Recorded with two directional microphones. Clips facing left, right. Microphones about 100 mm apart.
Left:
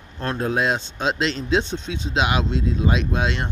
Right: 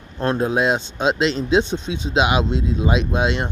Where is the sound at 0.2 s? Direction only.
15° right (ahead or behind).